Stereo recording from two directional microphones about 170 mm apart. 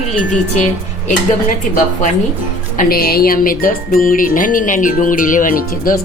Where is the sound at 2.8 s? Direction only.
60° left (ahead or behind).